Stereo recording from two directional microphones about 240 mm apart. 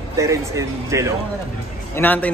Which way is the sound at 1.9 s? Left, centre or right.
Centre.